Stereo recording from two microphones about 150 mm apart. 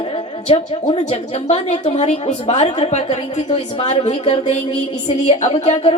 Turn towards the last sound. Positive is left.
turn(degrees=50)  # may be behind; listen again after turning